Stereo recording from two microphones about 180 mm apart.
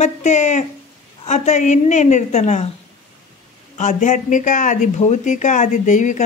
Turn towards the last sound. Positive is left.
turn(degrees=45)  # may be behind; listen again after turning